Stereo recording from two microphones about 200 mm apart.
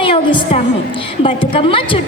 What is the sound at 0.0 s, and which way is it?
A woman's voice, 25° left (ahead or behind).